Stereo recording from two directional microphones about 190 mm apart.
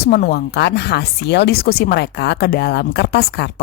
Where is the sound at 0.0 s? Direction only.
55° left (ahead or behind).